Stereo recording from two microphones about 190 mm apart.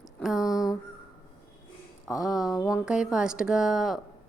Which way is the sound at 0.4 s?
20° left (ahead or behind).